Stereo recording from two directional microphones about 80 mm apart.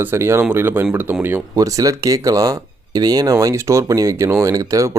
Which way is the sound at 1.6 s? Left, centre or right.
Right.